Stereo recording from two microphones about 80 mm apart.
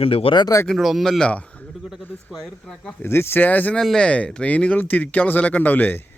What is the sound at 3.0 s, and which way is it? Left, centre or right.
Speech, left.